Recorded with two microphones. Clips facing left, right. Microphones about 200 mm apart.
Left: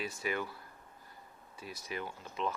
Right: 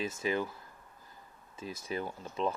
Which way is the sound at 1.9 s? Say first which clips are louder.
Right 4 dB; 35° right (ahead or behind).